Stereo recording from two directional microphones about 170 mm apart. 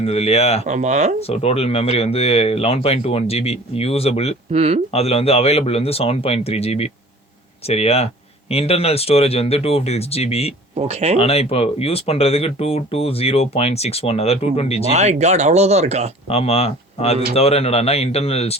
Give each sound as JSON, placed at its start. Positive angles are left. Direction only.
{"t": 0.0, "sound": "speech", "side_deg": 35}
{"t": 0.7, "sound": "speech", "side_deg": -45}
{"t": 1.3, "sound": "speech", "side_deg": 35}
{"t": 4.5, "sound": "speech", "side_deg": -35}
{"t": 4.9, "sound": "speech", "side_deg": 35}
{"t": 10.8, "sound": "speech", "side_deg": -40}
{"t": 11.2, "sound": "speech", "side_deg": 35}
{"t": 14.9, "sound": "speech", "side_deg": -40}
{"t": 16.3, "sound": "speech", "side_deg": 35}